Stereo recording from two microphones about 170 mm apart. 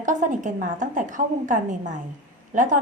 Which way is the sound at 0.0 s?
50° right (ahead or behind).